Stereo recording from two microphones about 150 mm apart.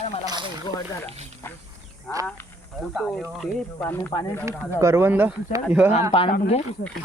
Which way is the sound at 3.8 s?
15° left (ahead or behind).